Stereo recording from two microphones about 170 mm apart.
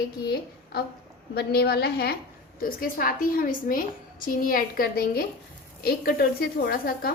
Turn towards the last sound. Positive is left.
turn(degrees=60)  # may be behind; listen again after turning